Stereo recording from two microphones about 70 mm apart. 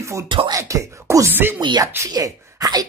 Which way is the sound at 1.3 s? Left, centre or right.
Right.